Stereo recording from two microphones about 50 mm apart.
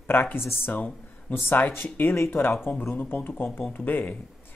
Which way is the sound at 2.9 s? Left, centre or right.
Left.